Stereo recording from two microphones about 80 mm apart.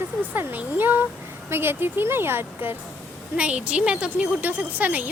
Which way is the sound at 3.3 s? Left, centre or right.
Centre.